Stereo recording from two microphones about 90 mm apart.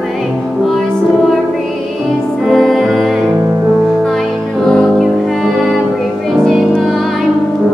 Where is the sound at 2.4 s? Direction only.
Centre (ahead or behind).